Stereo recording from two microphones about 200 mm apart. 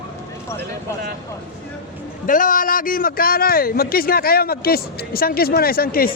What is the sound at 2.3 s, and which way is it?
A man's voice, 40° left (ahead or behind).